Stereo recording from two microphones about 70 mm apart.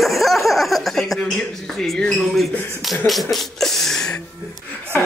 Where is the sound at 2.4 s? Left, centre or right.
Centre.